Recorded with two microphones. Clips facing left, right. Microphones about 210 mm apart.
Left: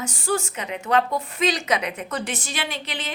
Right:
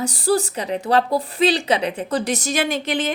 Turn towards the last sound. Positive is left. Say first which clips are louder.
# right 10 dB
turn(degrees=-50)  # may be behind; listen again after turning